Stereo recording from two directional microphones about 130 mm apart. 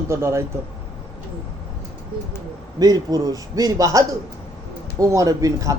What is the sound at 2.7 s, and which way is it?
A man's voice, 30° right (ahead or behind).